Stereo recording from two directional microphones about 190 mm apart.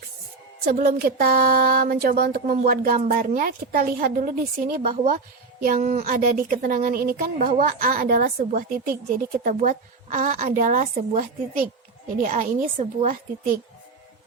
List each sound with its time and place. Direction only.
0.6 s a woman's voice: 50° right (ahead or behind)